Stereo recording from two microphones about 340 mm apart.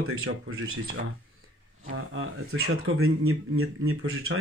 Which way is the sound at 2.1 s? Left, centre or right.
Right.